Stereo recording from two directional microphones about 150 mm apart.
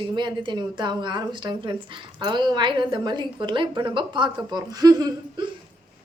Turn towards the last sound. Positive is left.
turn(degrees=-25)  # may be behind; listen again after turning